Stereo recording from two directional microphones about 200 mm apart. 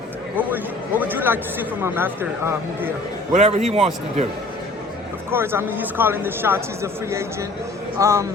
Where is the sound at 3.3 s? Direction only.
35° right (ahead or behind).